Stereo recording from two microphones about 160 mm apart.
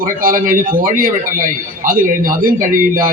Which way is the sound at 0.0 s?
60° right (ahead or behind).